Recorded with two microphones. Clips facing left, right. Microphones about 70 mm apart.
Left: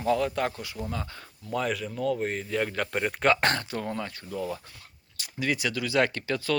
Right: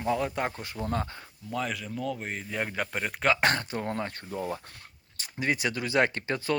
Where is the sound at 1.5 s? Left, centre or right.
Centre.